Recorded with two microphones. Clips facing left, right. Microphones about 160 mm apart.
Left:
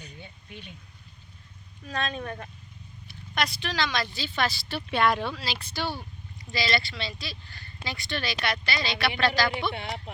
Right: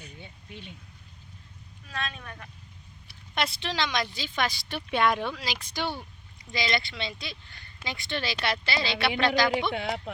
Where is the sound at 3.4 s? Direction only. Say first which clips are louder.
Left 1 dB; 25° right (ahead or behind).